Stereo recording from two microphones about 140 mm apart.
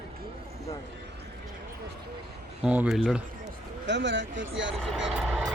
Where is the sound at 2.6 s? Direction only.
5° right (ahead or behind).